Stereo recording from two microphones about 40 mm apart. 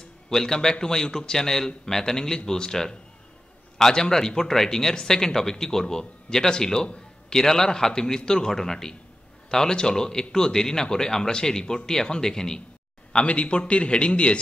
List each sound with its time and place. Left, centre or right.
0.3 s speech: centre
13.1 s a man's voice: left